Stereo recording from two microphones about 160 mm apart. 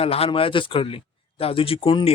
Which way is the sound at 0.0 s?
35° left (ahead or behind).